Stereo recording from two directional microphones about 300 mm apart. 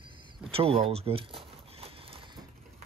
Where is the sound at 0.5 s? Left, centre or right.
Centre.